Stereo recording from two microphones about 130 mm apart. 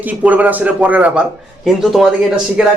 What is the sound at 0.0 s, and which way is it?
Speech, 10° right (ahead or behind).